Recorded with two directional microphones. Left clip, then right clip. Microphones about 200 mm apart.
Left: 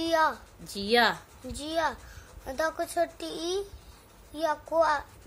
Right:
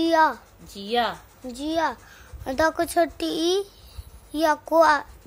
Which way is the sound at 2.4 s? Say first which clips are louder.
Right 8 dB; 45° right (ahead or behind).